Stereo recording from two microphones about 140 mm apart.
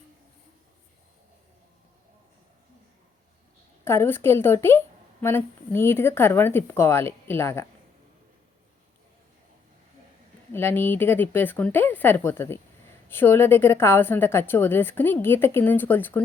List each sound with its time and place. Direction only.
3.8 s a woman's voice: 15° left (ahead or behind)
10.5 s a woman's voice: 15° left (ahead or behind)